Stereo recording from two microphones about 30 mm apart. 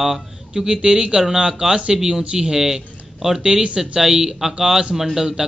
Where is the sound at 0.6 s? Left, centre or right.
Right.